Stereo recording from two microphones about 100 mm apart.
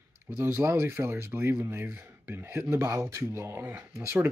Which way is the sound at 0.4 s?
20° right (ahead or behind).